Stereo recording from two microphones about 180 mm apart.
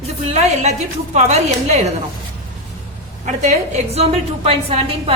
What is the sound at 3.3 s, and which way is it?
A woman's voice, 40° right (ahead or behind).